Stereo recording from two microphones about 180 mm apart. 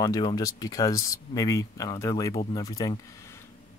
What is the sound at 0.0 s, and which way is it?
Speech, 25° left (ahead or behind).